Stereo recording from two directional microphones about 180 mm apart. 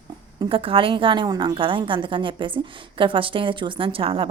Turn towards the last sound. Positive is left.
turn(degrees=-30)  # may be behind; listen again after turning